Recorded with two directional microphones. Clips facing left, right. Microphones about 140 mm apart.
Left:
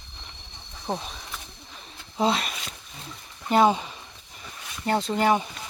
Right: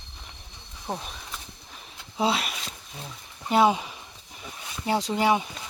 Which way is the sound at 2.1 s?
5° right (ahead or behind).